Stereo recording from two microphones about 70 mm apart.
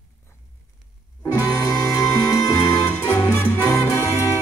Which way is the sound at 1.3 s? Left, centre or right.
Left.